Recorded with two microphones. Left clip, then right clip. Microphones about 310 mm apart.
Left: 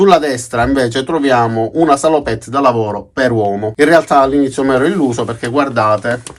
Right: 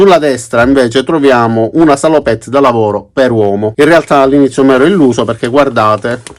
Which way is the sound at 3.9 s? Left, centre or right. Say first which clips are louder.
Right 2 dB; right.